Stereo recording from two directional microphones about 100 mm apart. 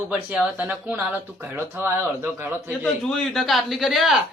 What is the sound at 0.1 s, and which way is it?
Speech, 15° right (ahead or behind).